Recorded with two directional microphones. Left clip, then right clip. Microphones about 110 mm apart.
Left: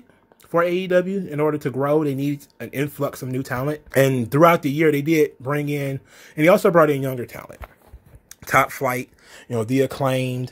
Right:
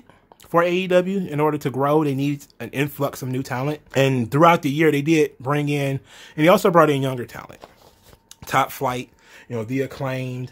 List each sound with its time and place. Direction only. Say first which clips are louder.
0.5 s speech: right 1 dB; 15° right (ahead or behind)
6.1 s speech: even; 5° left (ahead or behind)
8.6 s speech: left 1 dB; centre (ahead or behind)
9.3 s speech: left 4 dB; 30° left (ahead or behind)